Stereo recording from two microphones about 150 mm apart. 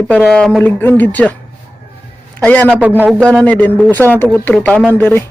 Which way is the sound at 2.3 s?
10° left (ahead or behind).